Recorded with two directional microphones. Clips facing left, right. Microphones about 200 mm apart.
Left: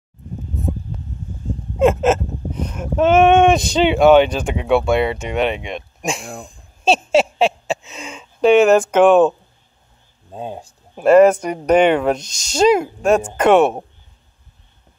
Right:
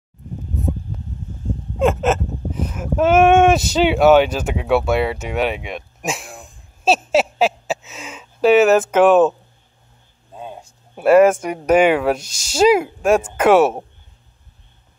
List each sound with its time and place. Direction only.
1.8 s speech: centre (ahead or behind)
10.3 s speech: 30° left (ahead or behind)
11.0 s speech: 5° right (ahead or behind)